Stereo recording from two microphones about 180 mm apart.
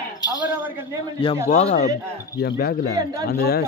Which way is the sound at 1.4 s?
40° left (ahead or behind).